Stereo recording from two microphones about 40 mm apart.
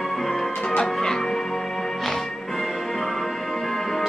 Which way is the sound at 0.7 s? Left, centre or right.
Centre.